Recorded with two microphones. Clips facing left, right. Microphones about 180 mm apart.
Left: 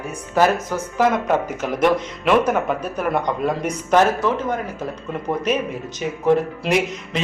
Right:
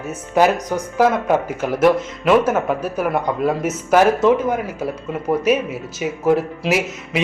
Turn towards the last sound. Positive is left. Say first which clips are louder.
# even
turn(degrees=-5)  # may be behind; listen again after turning